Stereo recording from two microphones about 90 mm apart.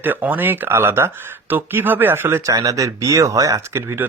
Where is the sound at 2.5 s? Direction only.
40° right (ahead or behind).